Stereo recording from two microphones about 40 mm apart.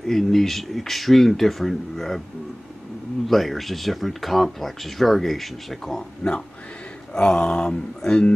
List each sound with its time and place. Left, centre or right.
0.0 s speech: centre
3.3 s speech: centre
6.2 s a sound: centre